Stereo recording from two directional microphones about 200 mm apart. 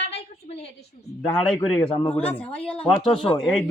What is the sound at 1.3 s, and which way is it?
Speech, 10° left (ahead or behind).